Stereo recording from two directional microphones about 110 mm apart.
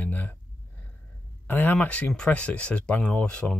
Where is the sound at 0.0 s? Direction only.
15° left (ahead or behind).